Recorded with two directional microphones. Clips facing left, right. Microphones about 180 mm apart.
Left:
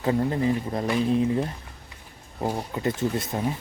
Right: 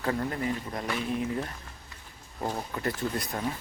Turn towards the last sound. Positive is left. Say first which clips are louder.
# left 5 dB
turn(degrees=20)  # may be behind; listen again after turning